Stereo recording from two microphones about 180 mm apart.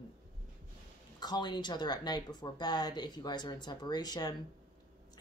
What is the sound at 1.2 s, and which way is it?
Speech, 25° left (ahead or behind).